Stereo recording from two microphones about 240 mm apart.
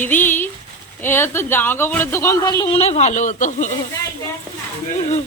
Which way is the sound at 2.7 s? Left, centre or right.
Left.